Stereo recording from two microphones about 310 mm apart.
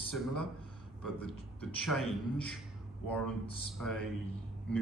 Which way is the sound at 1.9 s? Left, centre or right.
Centre.